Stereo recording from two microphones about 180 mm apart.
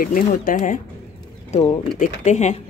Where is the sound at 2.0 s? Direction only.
40° left (ahead or behind).